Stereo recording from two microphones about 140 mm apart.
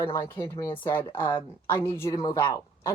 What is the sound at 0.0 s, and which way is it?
Speech, 20° left (ahead or behind).